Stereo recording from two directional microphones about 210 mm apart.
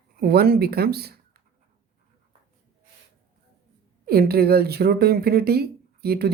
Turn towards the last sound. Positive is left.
turn(degrees=-50)  # may be behind; listen again after turning